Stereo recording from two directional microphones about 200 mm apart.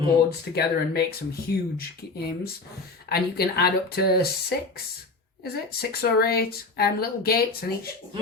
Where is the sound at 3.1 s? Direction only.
50° left (ahead or behind).